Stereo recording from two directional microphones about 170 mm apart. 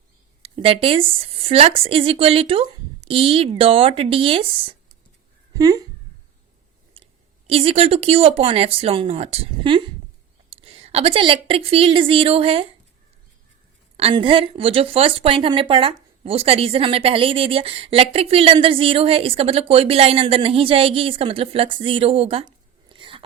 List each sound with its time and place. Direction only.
0.4 s a woman's voice: 30° right (ahead or behind)
5.5 s speech: 20° right (ahead or behind)
7.4 s a woman's voice: 35° right (ahead or behind)
13.9 s a woman's voice: 35° right (ahead or behind)